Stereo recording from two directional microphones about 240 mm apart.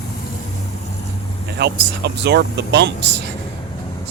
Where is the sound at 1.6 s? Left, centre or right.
Right.